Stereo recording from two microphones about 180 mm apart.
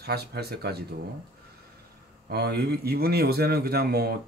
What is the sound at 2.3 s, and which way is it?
Speech, 65° right (ahead or behind).